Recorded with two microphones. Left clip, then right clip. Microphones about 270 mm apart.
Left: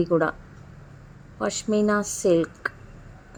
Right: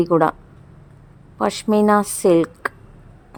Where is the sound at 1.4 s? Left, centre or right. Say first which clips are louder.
Right 6 dB; right.